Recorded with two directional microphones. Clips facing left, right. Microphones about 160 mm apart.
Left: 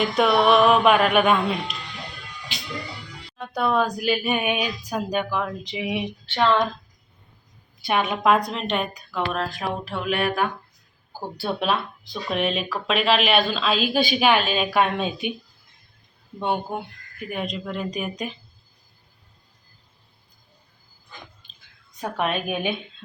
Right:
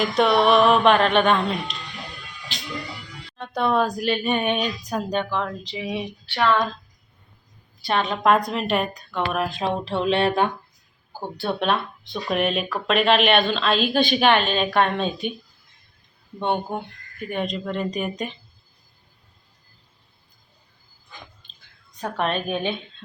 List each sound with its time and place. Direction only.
0.0 s speech: centre (ahead or behind)
3.3 s speech: centre (ahead or behind); by 6.7 s 20° left (ahead or behind)
7.9 s a woman's voice: 10° left (ahead or behind)
9.3 s speech: 20° right (ahead or behind)
11.3 s speech: 5° left (ahead or behind)
16.4 s speech: 5° left (ahead or behind)
22.0 s speech: 10° left (ahead or behind)